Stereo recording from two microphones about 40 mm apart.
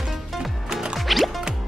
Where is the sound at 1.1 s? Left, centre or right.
Centre.